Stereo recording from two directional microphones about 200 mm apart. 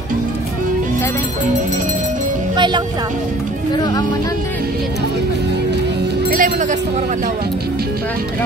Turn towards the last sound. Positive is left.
turn(degrees=-40)  # may be behind; listen again after turning